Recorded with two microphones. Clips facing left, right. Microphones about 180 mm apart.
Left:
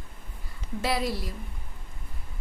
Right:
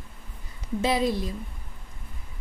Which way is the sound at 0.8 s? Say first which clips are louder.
Right 4 dB; 20° right (ahead or behind).